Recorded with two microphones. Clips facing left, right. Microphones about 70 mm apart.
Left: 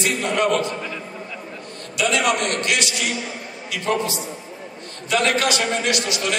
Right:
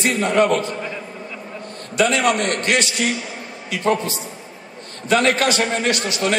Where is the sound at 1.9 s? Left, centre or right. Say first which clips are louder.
Right 3 dB; right.